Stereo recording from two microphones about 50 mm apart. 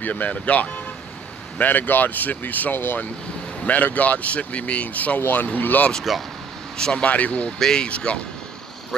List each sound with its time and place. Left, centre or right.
0.0 s speech: left
3.6 s speech: left
6.1 s speech: centre
6.8 s speech: centre
7.1 s speech: left
7.5 s speech: centre